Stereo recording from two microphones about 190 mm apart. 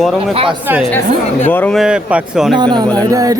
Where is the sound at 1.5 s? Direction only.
10° left (ahead or behind).